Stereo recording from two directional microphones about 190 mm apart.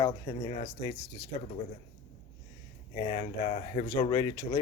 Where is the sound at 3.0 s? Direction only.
30° left (ahead or behind).